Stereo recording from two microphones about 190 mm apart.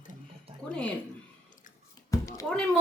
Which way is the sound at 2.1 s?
15° left (ahead or behind).